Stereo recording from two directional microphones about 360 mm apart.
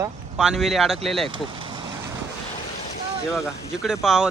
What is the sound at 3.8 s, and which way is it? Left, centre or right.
Speech, centre.